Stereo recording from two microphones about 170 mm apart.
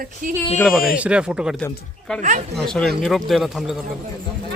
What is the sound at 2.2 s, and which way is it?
Speech, 45° right (ahead or behind).